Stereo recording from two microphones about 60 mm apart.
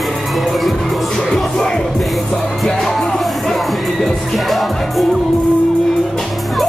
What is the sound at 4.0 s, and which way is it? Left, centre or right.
Music, centre.